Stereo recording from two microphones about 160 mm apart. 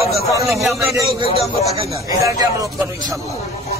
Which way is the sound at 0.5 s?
Centre (ahead or behind).